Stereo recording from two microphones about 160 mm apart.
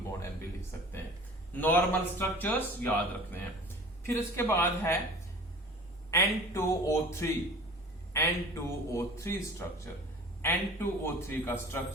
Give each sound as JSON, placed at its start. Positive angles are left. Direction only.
{"t": 0.0, "sound": "a sound", "side_deg": 15}
{"t": 1.5, "sound": "a man's voice", "side_deg": 10}
{"t": 4.0, "sound": "a man's voice", "side_deg": 15}
{"t": 6.1, "sound": "a man's voice", "side_deg": 15}